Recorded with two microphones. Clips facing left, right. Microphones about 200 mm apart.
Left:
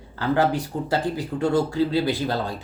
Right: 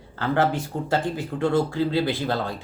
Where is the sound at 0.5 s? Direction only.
40° left (ahead or behind).